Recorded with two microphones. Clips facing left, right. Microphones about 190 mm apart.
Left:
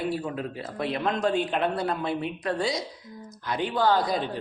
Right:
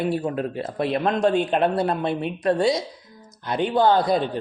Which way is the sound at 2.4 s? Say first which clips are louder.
Right 7 dB; 60° right (ahead or behind).